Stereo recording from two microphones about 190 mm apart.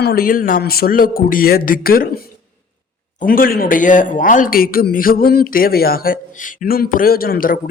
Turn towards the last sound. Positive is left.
turn(degrees=50)  # may be behind; listen again after turning